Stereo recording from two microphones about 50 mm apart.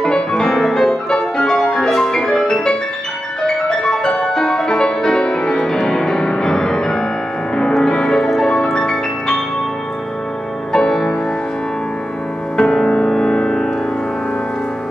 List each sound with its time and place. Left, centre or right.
0.0 s music: centre
10.7 s music: centre
12.5 s music: centre